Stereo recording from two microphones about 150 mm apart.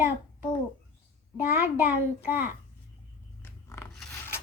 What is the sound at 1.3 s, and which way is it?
A child's voice, 15° right (ahead or behind).